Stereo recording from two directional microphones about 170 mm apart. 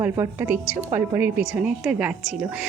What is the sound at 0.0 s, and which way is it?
A woman's voice, 10° right (ahead or behind).